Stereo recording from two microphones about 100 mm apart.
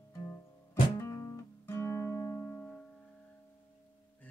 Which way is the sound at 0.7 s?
25° left (ahead or behind).